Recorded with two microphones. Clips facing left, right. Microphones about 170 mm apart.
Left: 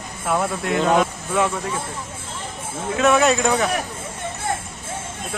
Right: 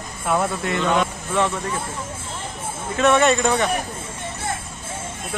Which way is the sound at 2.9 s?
Centre (ahead or behind).